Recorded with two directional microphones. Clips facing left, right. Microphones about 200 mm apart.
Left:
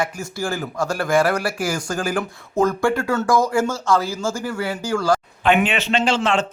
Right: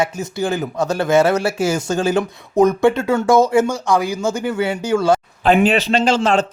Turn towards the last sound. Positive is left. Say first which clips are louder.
# right 4 dB
turn(degrees=-40)  # may be behind; listen again after turning